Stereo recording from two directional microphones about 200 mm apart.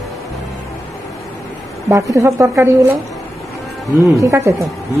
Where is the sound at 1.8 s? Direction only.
15° right (ahead or behind).